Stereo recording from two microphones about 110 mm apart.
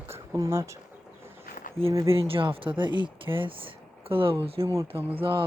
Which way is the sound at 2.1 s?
60° right (ahead or behind).